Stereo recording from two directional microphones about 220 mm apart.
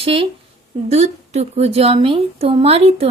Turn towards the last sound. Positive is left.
turn(degrees=-25)  # may be behind; listen again after turning